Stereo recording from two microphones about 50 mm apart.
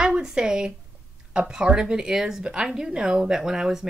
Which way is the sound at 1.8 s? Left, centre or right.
Centre.